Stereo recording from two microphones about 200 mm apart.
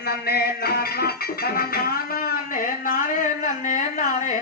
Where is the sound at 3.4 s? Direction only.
40° left (ahead or behind).